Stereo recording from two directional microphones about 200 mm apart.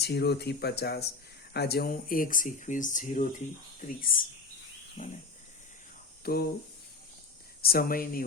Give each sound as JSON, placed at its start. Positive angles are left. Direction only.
{"t": 0.0, "sound": "speech", "side_deg": 55}
{"t": 6.2, "sound": "speech", "side_deg": 50}
{"t": 7.6, "sound": "speech", "side_deg": 50}